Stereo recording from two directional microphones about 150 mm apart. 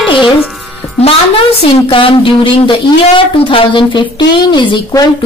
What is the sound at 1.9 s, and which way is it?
A woman's voice, 35° left (ahead or behind).